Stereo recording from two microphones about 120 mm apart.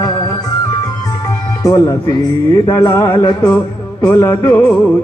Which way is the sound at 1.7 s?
30° left (ahead or behind).